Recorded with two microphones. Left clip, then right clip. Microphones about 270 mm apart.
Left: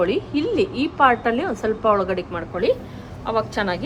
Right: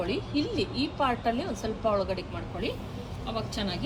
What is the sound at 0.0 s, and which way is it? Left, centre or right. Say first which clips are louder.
A woman's voice: left 9 dB; centre.